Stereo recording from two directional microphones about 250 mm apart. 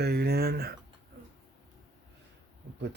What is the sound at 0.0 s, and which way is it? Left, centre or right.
Speech, right.